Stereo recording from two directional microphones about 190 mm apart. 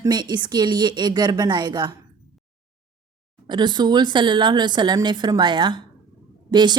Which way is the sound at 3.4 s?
25° right (ahead or behind).